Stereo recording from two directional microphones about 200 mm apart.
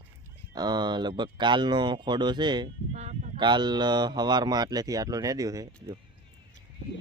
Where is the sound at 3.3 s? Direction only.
20° right (ahead or behind).